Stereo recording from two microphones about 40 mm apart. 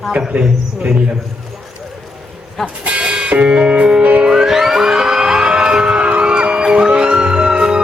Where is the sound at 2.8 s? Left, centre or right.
Right.